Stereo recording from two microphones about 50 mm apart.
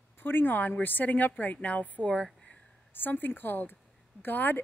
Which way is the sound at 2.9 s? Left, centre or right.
Left.